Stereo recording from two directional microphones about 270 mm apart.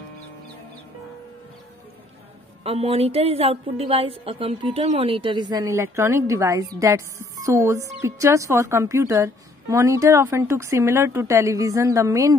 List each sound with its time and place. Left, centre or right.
2.6 s a woman's voice: right